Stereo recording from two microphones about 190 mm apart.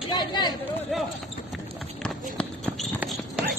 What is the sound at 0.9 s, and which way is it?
Basketball bounce, centre (ahead or behind).